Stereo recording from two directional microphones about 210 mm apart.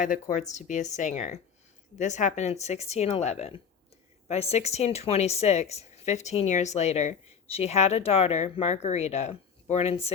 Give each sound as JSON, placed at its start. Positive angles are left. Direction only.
{"t": 0.0, "sound": "speech", "side_deg": 35}